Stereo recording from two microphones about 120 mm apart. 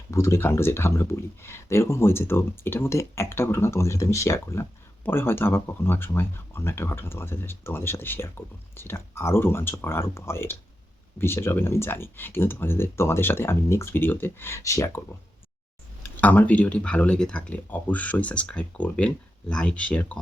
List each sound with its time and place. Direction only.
0.1 s speech: 25° left (ahead or behind)
16.1 s speech: 15° left (ahead or behind)